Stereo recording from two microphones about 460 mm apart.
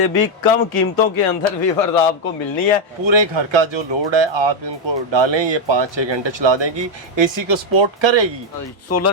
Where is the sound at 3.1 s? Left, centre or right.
Right.